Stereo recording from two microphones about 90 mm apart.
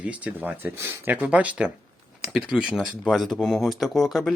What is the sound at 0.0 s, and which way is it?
Speech, 15° right (ahead or behind).